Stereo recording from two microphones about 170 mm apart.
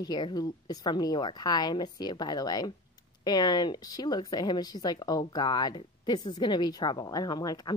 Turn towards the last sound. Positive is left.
turn(degrees=20)  # may be behind; listen again after turning